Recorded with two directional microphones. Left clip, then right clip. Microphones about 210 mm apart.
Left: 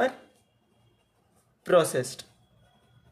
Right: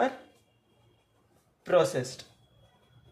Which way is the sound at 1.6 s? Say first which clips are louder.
Left 2 dB; 40° left (ahead or behind).